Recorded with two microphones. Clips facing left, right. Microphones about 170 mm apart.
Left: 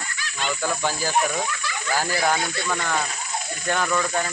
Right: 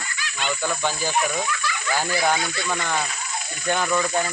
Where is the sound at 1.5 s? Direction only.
30° left (ahead or behind).